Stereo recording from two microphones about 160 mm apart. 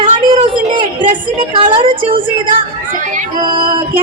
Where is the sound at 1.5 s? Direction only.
30° right (ahead or behind).